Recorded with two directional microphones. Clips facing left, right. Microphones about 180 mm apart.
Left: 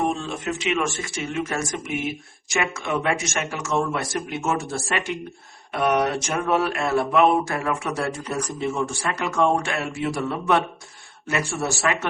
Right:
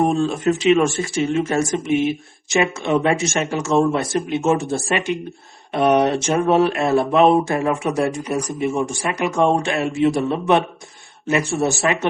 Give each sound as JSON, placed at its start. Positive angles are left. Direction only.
{"t": 0.0, "sound": "speech", "side_deg": -40}